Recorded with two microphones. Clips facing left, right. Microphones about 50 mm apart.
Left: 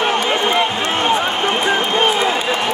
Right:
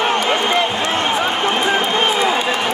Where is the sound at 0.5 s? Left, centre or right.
Left.